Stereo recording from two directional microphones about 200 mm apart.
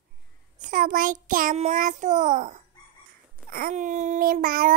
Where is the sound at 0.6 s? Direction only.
45° right (ahead or behind).